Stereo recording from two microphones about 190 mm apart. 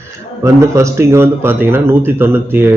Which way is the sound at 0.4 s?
15° right (ahead or behind).